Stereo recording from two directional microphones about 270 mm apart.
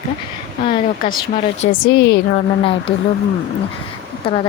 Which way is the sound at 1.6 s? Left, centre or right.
Left.